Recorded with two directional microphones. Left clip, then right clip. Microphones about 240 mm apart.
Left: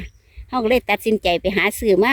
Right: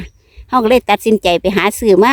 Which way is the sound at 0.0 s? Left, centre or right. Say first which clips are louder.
Right 5 dB; centre.